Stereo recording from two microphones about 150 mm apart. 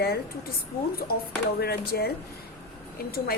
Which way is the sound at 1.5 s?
90° left.